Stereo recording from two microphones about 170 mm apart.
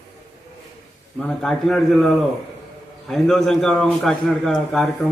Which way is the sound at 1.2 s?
5° left (ahead or behind).